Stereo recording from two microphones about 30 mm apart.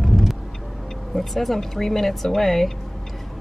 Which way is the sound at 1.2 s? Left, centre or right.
Centre.